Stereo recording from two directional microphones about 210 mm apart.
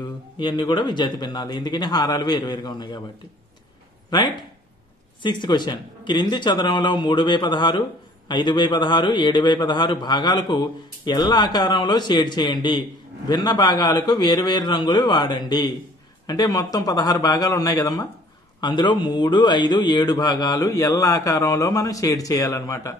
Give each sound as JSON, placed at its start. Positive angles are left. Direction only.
{"t": 0.0, "sound": "a man's voice", "side_deg": 20}
{"t": 4.1, "sound": "a man's voice", "side_deg": 20}